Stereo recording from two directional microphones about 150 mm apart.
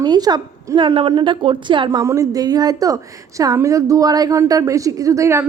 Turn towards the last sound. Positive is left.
turn(degrees=-20)  # may be behind; listen again after turning